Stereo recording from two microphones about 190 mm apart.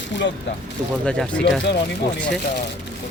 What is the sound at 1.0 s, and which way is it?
Speech, 5° left (ahead or behind).